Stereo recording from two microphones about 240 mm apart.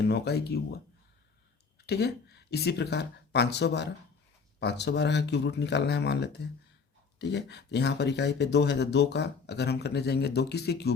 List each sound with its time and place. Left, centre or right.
0.0 s speech: left
1.9 s speech: left